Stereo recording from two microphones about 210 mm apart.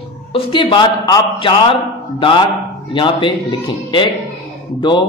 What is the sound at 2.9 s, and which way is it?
A man's voice, 25° left (ahead or behind).